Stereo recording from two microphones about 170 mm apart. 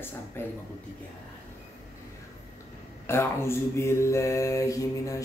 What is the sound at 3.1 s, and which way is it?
Mantra, 15° left (ahead or behind).